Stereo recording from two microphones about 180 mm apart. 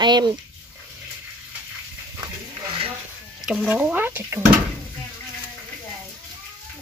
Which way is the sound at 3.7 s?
10° right (ahead or behind).